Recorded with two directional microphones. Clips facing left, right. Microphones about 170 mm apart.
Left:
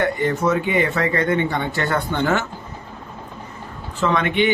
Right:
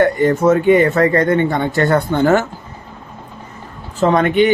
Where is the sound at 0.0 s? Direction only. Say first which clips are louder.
Right 7 dB; 45° right (ahead or behind).